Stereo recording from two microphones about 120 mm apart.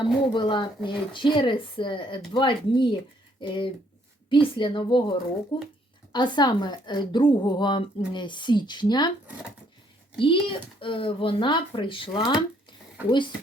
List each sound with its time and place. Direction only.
0.0 s a woman's voice: 40° left (ahead or behind)
10.2 s speech: 45° left (ahead or behind)